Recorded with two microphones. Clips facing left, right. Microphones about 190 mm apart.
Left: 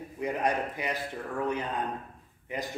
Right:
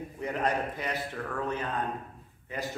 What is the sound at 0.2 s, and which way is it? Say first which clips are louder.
Speech: left 1 dB; 15° left (ahead or behind).